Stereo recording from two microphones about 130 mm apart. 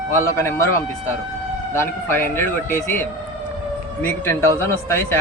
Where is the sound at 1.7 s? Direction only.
20° left (ahead or behind).